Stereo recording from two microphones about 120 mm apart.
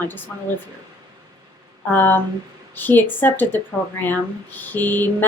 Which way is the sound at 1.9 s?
15° left (ahead or behind).